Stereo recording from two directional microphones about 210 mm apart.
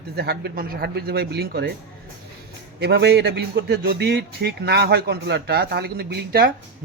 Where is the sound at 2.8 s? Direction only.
50° right (ahead or behind).